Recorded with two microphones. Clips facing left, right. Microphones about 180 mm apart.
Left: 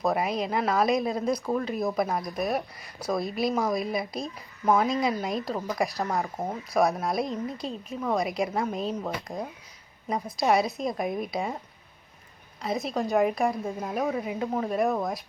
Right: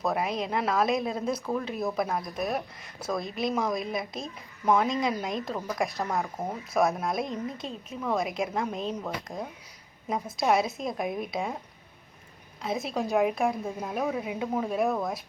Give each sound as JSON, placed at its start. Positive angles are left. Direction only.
{"t": 0.0, "sound": "speech", "side_deg": 0}
{"t": 6.3, "sound": "speech", "side_deg": 15}
{"t": 6.7, "sound": "speech", "side_deg": 0}
{"t": 12.6, "sound": "speech", "side_deg": 0}